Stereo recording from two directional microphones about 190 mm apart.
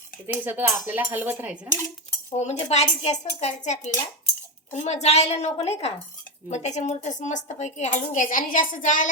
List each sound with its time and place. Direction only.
0.4 s speech: 10° right (ahead or behind)
2.4 s a woman's voice: 35° left (ahead or behind)